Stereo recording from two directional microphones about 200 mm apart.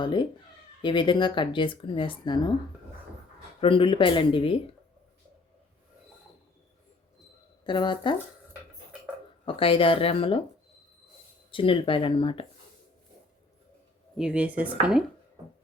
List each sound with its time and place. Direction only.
0.0 s speech: 25° left (ahead or behind)
3.6 s speech: 25° left (ahead or behind)
7.6 s speech: 20° left (ahead or behind)
9.5 s speech: 25° left (ahead or behind)
11.5 s speech: 25° left (ahead or behind)
14.2 s speech: 5° right (ahead or behind)